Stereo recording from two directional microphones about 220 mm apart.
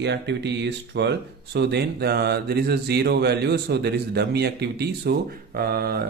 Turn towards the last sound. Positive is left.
turn(degrees=-45)  # may be behind; listen again after turning